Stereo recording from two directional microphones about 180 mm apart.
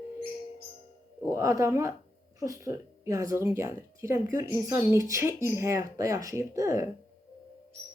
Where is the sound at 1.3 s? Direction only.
15° right (ahead or behind).